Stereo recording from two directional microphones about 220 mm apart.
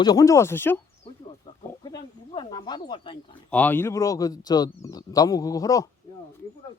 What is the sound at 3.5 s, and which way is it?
Speech, 5° left (ahead or behind).